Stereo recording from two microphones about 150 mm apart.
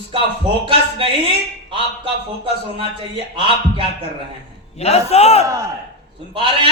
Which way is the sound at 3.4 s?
35° right (ahead or behind).